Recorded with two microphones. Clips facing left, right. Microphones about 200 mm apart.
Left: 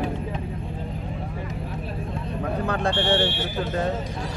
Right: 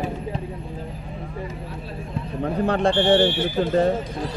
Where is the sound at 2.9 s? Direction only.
15° right (ahead or behind).